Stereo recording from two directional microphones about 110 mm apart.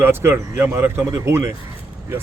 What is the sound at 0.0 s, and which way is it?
Speech, 20° right (ahead or behind).